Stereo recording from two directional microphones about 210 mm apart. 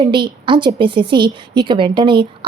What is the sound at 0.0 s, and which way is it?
A woman's voice, 20° right (ahead or behind).